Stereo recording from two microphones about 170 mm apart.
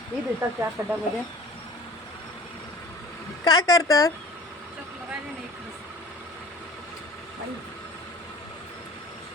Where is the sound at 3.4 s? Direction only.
25° left (ahead or behind).